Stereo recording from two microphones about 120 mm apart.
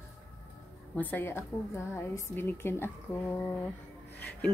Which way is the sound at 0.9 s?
15° left (ahead or behind).